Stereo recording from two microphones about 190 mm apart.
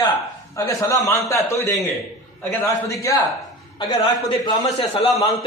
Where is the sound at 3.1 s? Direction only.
15° left (ahead or behind).